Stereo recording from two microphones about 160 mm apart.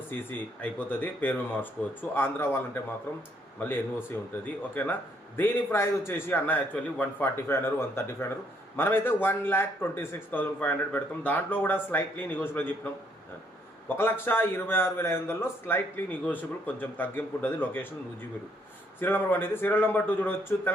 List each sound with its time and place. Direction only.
0.1 s a man's voice: 10° left (ahead or behind)
3.6 s a man's voice: 10° left (ahead or behind)
18.9 s a man's voice: 15° left (ahead or behind)